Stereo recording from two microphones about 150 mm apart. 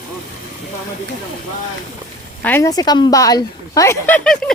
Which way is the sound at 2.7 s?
25° left (ahead or behind).